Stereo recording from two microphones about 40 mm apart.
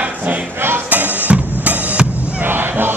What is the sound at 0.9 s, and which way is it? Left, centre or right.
Drum kit, right.